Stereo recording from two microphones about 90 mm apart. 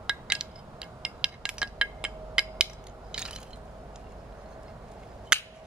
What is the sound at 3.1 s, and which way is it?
Mechanisms, 10° right (ahead or behind).